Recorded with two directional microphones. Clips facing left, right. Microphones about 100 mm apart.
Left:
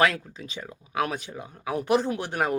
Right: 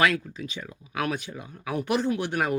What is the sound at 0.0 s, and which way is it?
Speech, 30° left (ahead or behind).